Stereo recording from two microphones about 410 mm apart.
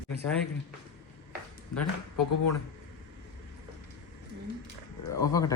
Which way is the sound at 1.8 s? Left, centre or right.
Left.